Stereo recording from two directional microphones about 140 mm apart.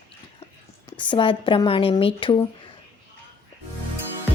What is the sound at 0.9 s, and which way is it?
Speech, 35° left (ahead or behind).